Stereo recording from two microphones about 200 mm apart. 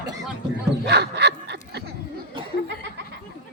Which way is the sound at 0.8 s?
55° right (ahead or behind).